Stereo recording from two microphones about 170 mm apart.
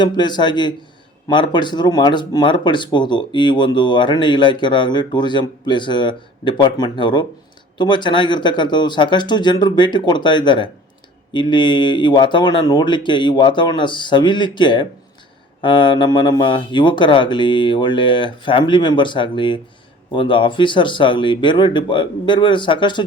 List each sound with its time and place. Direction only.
0.0 s speech: 25° left (ahead or behind)